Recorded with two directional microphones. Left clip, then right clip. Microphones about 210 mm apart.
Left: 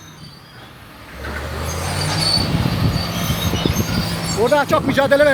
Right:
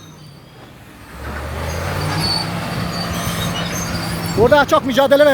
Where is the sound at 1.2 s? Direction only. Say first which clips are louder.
Even; 45° left (ahead or behind).